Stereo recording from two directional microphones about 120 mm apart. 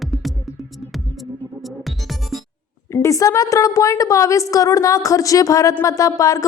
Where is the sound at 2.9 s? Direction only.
25° left (ahead or behind).